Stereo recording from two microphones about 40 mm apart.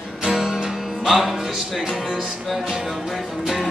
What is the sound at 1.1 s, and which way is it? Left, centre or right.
Music, centre.